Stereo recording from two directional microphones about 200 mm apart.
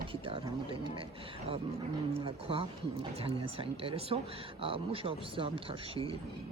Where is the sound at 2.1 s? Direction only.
25° right (ahead or behind).